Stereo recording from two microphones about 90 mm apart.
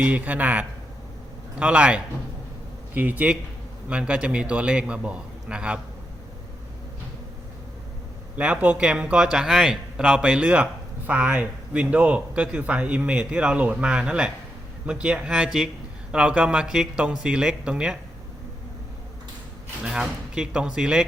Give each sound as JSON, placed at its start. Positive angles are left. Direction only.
{"t": 0.0, "sound": "a man's voice", "side_deg": -15}
{"t": 8.4, "sound": "a man's voice", "side_deg": -15}
{"t": 19.8, "sound": "a man's voice", "side_deg": -5}